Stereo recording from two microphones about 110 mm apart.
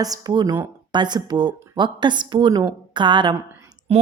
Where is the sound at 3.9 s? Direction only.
60° right (ahead or behind).